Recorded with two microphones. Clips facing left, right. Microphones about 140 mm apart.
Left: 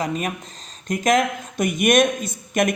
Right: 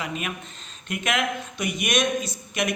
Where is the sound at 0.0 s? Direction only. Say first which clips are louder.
Left 6 dB; 40° left (ahead or behind).